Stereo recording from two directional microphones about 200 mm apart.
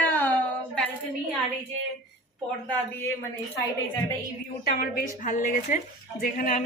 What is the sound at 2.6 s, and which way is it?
Speech, 10° left (ahead or behind).